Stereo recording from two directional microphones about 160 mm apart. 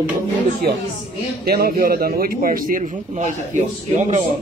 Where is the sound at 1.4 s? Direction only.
70° right (ahead or behind); by 4.2 s 45° right (ahead or behind).